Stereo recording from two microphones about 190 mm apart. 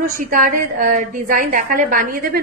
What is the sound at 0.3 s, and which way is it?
A woman's voice, 45° right (ahead or behind).